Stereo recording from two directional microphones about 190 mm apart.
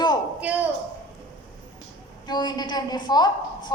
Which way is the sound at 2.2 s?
20° left (ahead or behind).